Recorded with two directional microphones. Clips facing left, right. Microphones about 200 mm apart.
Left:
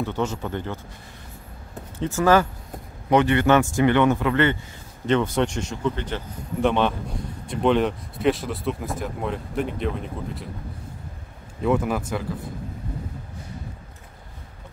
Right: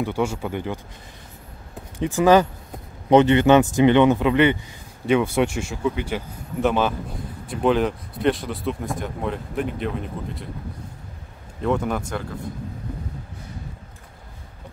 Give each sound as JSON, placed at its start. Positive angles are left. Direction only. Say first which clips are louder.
{"t": 0.0, "sound": "speech", "louder": "right 2 dB", "side_deg": -10}
{"t": 2.0, "sound": "speech", "louder": "right 3 dB", "side_deg": -15}
{"t": 11.6, "sound": "speech", "louder": "left 1 dB", "side_deg": 5}